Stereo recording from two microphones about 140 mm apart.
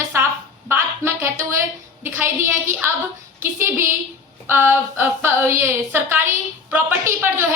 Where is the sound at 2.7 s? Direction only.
15° right (ahead or behind).